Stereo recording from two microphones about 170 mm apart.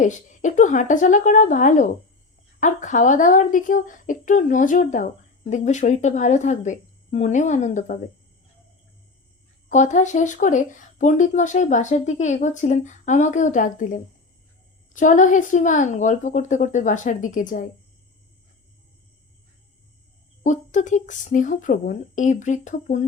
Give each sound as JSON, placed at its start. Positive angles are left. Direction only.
{"t": 0.0, "sound": "speech", "side_deg": 45}
{"t": 9.6, "sound": "speech", "side_deg": 45}
{"t": 20.4, "sound": "speech", "side_deg": 45}